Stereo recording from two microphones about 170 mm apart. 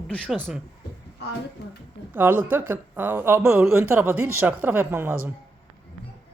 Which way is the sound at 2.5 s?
10° right (ahead or behind).